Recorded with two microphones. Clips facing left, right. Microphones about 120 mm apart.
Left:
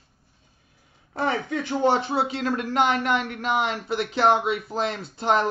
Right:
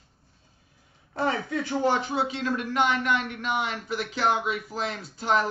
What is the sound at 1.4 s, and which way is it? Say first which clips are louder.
Speech: left 3 dB; 25° left (ahead or behind).